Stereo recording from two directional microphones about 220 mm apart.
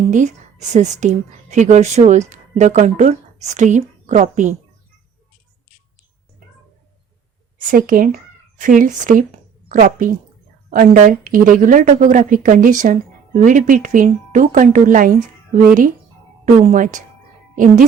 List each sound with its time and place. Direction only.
0.1 s a woman's voice: 35° right (ahead or behind)
7.6 s speech: 40° right (ahead or behind)